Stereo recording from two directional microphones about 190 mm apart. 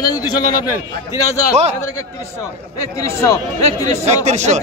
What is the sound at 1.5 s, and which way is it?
Speech, 35° right (ahead or behind).